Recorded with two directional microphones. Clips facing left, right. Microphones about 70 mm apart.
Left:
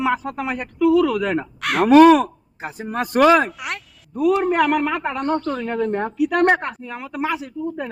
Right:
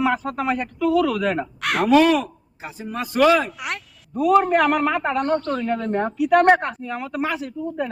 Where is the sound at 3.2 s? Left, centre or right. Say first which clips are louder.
Left 2 dB; left.